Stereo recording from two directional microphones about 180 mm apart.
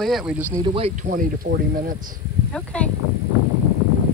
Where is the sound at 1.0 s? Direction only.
50° right (ahead or behind).